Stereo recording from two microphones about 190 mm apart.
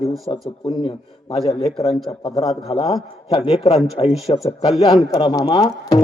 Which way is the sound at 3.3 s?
30° left (ahead or behind).